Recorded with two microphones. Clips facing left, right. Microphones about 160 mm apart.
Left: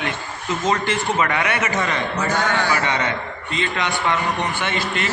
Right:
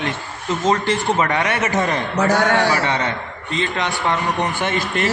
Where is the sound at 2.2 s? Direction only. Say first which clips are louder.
Right 7 dB; 75° right (ahead or behind).